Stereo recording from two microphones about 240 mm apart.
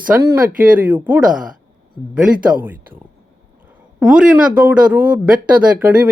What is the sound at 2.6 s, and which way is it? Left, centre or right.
Speech, centre.